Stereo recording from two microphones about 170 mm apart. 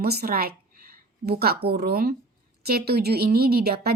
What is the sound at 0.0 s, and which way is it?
A woman's voice, 65° right (ahead or behind).